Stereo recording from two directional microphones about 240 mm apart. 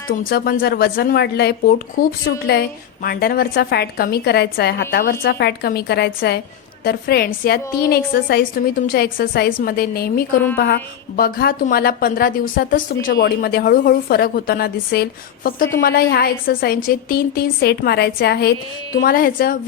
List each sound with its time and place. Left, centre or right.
0.3 s a woman's voice: left